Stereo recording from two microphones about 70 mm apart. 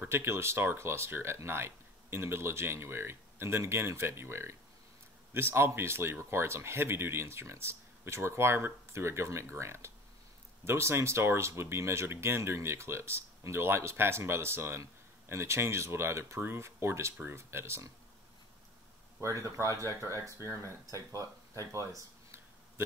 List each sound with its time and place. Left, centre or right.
0.1 s speech: right
19.1 s a man's voice: right